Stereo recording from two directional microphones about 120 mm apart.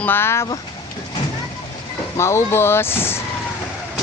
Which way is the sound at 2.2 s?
20° left (ahead or behind).